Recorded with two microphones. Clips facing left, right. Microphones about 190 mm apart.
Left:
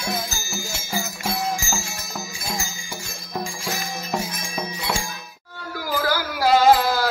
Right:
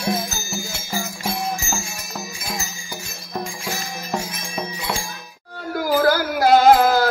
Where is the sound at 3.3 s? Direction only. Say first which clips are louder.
Right 1 dB; centre (ahead or behind).